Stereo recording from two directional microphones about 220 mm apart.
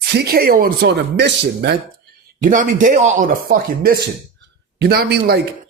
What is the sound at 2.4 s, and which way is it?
Speech, 35° right (ahead or behind).